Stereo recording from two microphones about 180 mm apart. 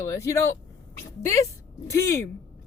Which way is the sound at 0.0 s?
15° left (ahead or behind).